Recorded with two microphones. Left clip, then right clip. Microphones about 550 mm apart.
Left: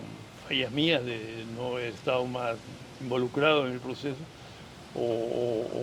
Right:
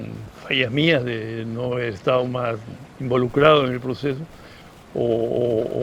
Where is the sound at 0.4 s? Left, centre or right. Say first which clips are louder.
Right 8 dB; right.